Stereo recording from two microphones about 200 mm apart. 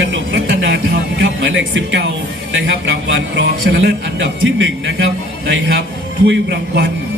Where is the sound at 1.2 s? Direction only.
65° right (ahead or behind).